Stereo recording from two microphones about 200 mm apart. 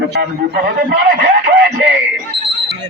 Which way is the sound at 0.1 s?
55° right (ahead or behind).